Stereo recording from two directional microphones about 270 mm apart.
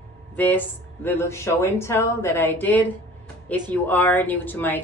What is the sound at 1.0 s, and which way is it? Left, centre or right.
Speech, centre.